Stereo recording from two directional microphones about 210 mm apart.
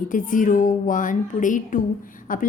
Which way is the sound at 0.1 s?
40° left (ahead or behind).